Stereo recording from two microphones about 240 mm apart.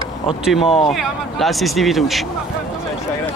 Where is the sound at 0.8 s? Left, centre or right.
Centre.